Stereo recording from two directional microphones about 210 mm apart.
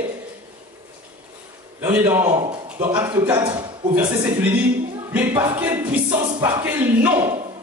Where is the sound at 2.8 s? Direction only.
10° right (ahead or behind).